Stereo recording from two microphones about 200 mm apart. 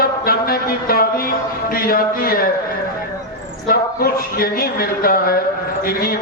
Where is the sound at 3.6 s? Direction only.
45° left (ahead or behind).